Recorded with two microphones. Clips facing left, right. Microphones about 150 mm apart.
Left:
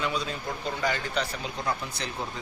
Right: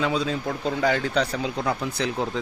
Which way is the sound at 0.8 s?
70° right (ahead or behind).